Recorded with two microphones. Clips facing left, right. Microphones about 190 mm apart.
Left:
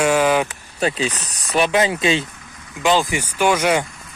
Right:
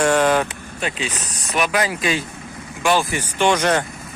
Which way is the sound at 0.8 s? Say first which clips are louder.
Left 5 dB; 35° left (ahead or behind).